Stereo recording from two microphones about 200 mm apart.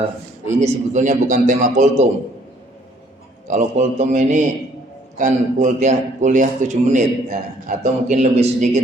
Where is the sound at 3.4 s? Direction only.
40° right (ahead or behind).